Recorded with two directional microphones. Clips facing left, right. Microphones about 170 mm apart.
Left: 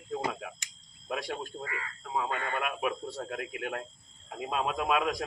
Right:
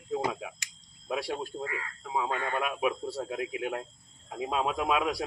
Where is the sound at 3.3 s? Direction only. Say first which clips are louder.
Right 3 dB; 20° right (ahead or behind).